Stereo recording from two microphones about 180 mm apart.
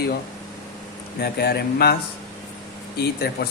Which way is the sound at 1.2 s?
60° left (ahead or behind).